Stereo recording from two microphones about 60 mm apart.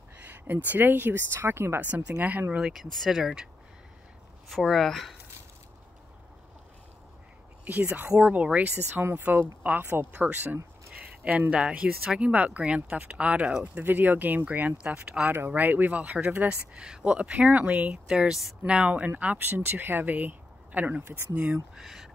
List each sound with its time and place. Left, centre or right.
0.2 s speech: right
1.8 s speech: right
2.6 s speech: centre
3.2 s speech: centre
4.5 s speech: centre
7.6 s speech: right
11.0 s a sound: right
11.5 s speech: centre
14.8 s speech: centre
15.3 s speech: right
16.7 s speech: centre
18.0 s speech: centre
21.7 s speech: centre